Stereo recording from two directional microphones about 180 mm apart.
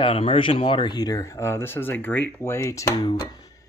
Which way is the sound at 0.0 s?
30° left (ahead or behind).